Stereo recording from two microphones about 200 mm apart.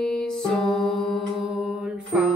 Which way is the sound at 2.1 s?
5° right (ahead or behind).